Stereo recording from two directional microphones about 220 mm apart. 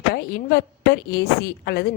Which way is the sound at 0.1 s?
45° left (ahead or behind).